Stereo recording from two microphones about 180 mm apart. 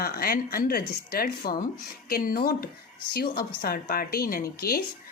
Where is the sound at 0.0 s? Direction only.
55° left (ahead or behind).